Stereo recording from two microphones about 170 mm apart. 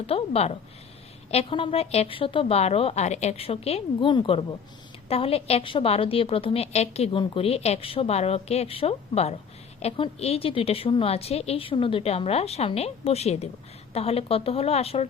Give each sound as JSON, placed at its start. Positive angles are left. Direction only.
{"t": 0.1, "sound": "a woman's voice", "side_deg": 35}